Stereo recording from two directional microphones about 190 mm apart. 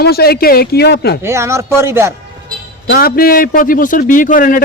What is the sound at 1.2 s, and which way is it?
Speech, 15° right (ahead or behind).